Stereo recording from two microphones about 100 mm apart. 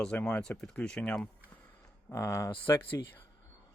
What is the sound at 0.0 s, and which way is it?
Speech, 10° left (ahead or behind).